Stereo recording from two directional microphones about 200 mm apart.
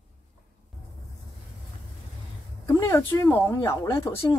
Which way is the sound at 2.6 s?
15° left (ahead or behind).